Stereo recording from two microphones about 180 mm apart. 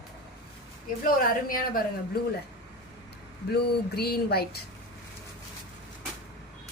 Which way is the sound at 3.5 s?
60° left (ahead or behind).